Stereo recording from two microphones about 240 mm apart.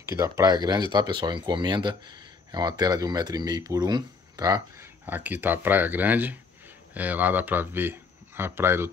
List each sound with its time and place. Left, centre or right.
0.0 s speech: centre